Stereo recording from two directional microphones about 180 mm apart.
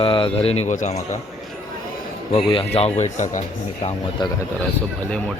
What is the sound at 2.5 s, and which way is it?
Speech, 30° left (ahead or behind).